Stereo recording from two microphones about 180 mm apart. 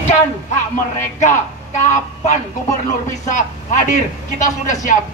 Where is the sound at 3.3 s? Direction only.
45° left (ahead or behind).